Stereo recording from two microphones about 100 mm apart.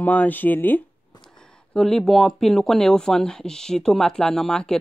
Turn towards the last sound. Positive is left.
turn(degrees=5)  # may be behind; listen again after turning